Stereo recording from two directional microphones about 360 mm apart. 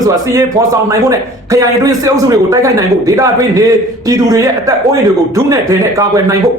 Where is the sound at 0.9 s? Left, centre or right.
Centre.